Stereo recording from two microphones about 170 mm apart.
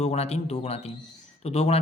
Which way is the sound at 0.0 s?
40° left (ahead or behind).